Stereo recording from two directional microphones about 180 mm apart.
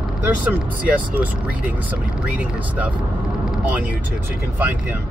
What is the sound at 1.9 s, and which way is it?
Speech, 10° right (ahead or behind).